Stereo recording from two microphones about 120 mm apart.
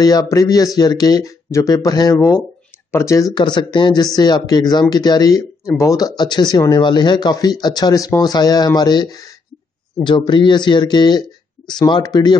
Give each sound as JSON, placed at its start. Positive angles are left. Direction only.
{"t": 0.0, "sound": "speech", "side_deg": 30}